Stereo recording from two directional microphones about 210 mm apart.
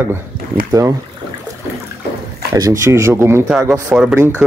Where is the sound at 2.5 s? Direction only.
15° right (ahead or behind).